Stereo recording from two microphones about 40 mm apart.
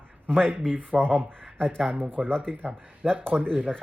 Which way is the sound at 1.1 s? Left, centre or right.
Right.